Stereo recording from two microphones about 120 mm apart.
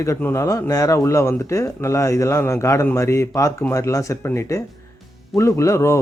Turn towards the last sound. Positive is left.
turn(degrees=25)  # may be behind; listen again after turning